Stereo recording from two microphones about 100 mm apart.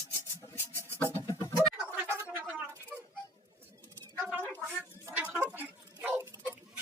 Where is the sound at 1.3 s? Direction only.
30° left (ahead or behind).